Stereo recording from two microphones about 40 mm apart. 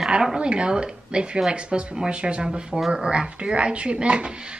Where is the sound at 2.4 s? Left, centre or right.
Centre.